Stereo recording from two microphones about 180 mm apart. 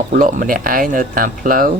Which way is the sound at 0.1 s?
45° right (ahead or behind).